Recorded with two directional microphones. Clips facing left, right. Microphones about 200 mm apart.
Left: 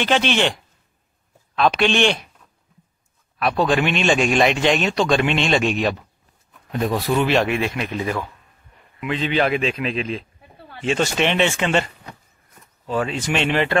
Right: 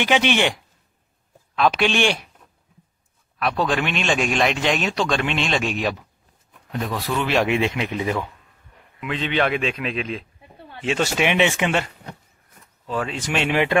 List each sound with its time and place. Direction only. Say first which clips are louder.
0.0 s speech: even; 15° right (ahead or behind)
3.3 s speech: left 3 dB; centre (ahead or behind)
7.4 s speech: right 1 dB; 20° right (ahead or behind)
9.0 s speech: left 2 dB; centre (ahead or behind)
12.8 s speech: left 3 dB; 5° left (ahead or behind)